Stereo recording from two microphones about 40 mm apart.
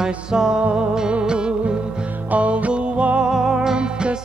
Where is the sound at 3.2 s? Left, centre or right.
Centre.